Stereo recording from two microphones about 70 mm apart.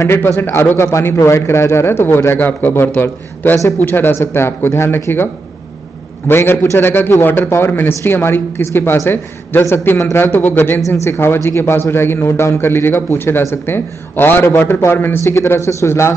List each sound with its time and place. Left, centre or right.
0.0 s a man's voice: left